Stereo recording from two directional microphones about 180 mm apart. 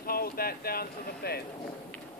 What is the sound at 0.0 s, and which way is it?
Speech, 55° left (ahead or behind).